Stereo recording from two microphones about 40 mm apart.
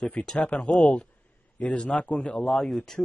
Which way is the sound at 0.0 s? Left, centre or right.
Left.